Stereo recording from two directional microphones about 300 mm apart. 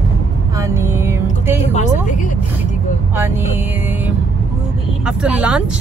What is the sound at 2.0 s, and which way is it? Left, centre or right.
Vehicle, left.